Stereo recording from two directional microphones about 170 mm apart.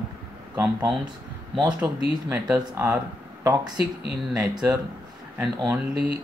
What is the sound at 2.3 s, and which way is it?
Speech, 10° right (ahead or behind).